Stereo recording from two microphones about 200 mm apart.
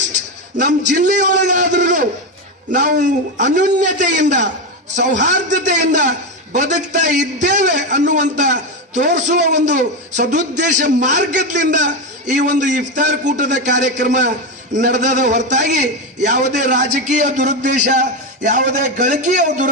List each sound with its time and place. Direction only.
0.5 s a man's voice: 40° right (ahead or behind)